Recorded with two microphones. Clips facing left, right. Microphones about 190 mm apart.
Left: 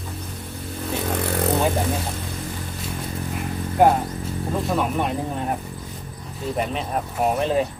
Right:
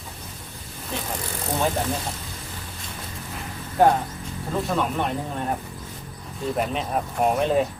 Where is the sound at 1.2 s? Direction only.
65° left (ahead or behind).